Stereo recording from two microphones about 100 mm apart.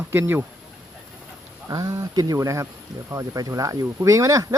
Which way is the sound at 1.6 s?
40° right (ahead or behind).